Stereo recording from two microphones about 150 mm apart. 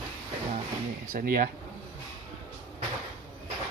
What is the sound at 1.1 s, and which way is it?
Speech, 70° right (ahead or behind).